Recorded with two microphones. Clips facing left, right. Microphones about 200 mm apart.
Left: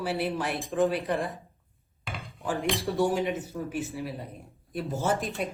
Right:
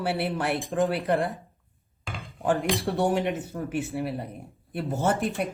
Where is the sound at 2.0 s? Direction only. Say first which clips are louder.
Right 1 dB; centre (ahead or behind).